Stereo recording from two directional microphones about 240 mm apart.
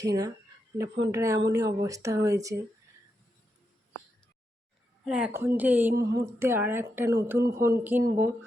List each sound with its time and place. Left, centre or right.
0.0 s speech: centre
5.0 s a woman's voice: centre